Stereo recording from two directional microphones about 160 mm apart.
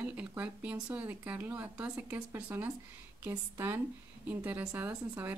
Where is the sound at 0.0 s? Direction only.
10° right (ahead or behind).